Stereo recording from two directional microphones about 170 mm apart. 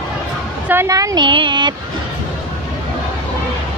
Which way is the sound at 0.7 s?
15° right (ahead or behind).